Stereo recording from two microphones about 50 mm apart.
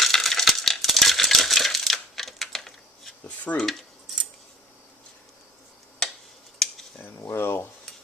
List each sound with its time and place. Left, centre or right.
0.0 s coin: centre
3.2 s speech: left
3.6 s keys jangling: centre
7.0 s a sound: left